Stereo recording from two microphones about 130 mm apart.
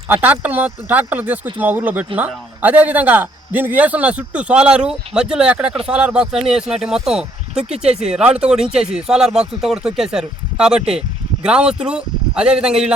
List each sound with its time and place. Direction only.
0.1 s a man's voice: 15° right (ahead or behind)